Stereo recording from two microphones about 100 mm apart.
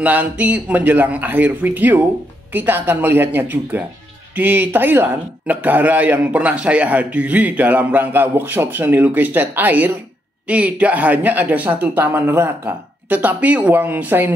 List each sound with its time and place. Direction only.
0.0 s a man's voice: 15° right (ahead or behind)